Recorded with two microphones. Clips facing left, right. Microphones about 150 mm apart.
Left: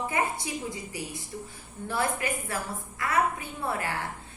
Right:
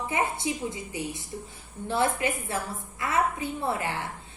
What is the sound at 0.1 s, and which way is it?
A woman's voice, 20° right (ahead or behind).